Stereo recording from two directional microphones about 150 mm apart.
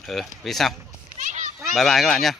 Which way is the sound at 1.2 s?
55° right (ahead or behind).